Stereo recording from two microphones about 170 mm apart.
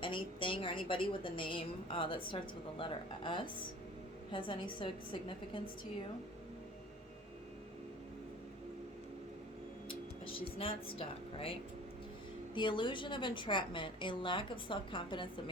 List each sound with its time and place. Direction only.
0.0 s a woman's voice: 30° left (ahead or behind)
9.9 s a sound: 30° left (ahead or behind)
10.9 s speech: 35° left (ahead or behind)
12.5 s a woman's voice: 30° left (ahead or behind)